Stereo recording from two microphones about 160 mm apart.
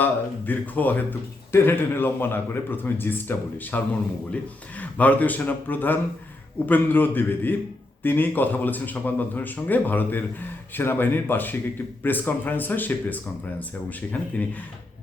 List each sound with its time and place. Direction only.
0.0 s speech: 10° left (ahead or behind)
14.1 s speech: 10° left (ahead or behind)